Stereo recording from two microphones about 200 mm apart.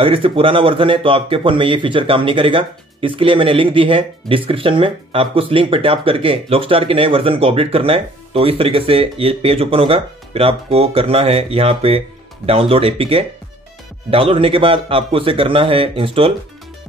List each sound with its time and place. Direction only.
0.0 s a man's voice: 25° right (ahead or behind)